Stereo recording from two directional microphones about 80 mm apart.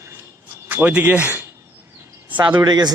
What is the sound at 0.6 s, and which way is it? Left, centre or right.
Speech, right.